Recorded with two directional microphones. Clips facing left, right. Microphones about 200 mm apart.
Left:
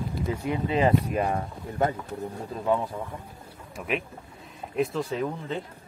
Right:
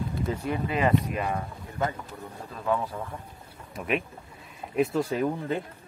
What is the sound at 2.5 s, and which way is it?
Speech, 25° left (ahead or behind).